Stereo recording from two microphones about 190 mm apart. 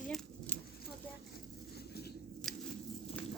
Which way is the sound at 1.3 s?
55° left (ahead or behind).